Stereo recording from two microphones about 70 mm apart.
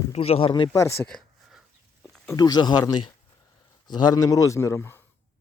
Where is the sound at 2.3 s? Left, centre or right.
Left.